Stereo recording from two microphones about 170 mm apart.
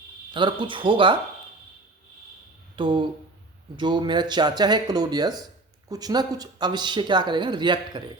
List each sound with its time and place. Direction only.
0.3 s speech: 30° right (ahead or behind)
2.7 s speech: 30° right (ahead or behind)